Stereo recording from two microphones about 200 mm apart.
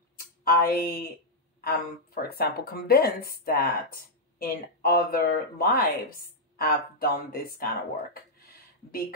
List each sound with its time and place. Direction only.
0.4 s speech: 45° left (ahead or behind)